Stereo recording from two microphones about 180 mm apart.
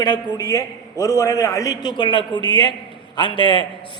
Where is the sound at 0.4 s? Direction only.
20° left (ahead or behind).